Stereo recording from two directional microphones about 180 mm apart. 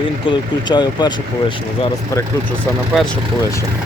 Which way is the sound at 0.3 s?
25° left (ahead or behind).